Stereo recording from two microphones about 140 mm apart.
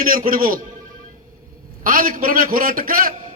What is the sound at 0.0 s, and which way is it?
Speech, 90° right.